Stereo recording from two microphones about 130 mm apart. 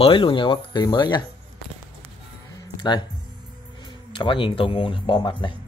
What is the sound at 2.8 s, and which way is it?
Speech, 35° left (ahead or behind).